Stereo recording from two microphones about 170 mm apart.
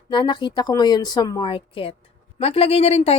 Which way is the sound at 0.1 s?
25° left (ahead or behind).